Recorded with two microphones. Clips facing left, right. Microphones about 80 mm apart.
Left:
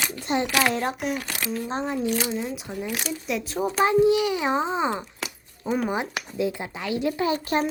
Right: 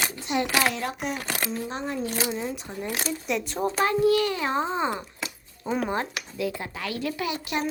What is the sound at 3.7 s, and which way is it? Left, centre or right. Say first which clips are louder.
A child's voice: left 3 dB; centre.